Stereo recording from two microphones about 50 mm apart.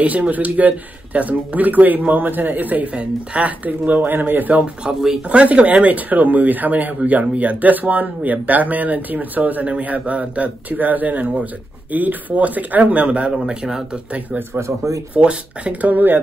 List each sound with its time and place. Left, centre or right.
0.0 s speech: right
4.8 s speech: centre
15.1 s speech: right